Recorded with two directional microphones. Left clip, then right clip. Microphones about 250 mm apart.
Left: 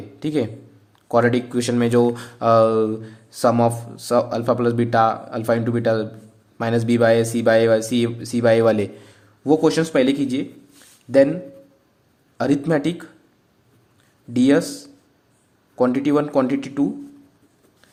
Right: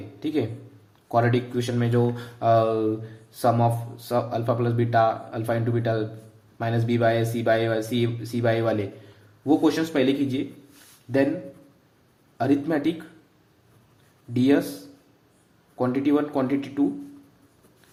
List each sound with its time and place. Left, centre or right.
0.2 s speech: left
12.4 s a man's voice: left
14.3 s a man's voice: left
15.8 s a man's voice: left